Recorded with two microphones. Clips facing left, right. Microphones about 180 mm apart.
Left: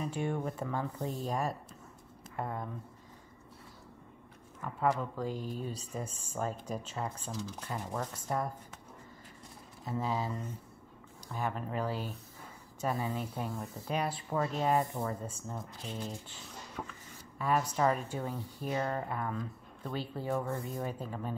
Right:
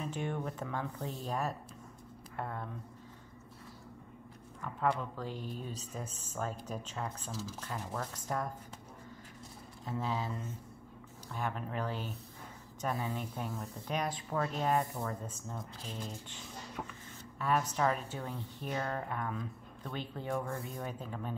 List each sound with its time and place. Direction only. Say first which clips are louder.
0.0 s speech: left 3 dB; 10° left (ahead or behind)
4.7 s speech: left 2 dB; 10° left (ahead or behind)
5.3 s speech: left 4 dB; 40° left (ahead or behind)
5.7 s speech: left 3 dB; 10° left (ahead or behind)
7.2 s speech: left 2 dB; 5° right (ahead or behind)
7.6 s speech: left 3 dB; 10° left (ahead or behind)
9.8 s speech: left 2 dB; 10° left (ahead or behind)
11.3 s speech: left 2 dB; 5° left (ahead or behind)
17.4 s speech: left 2 dB; 10° left (ahead or behind)